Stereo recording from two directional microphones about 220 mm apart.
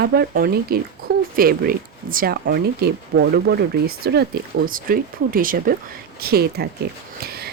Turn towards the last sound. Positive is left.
turn(degrees=-45)  # may be behind; listen again after turning